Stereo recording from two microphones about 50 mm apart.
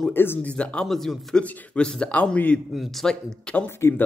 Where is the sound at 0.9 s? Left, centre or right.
Centre.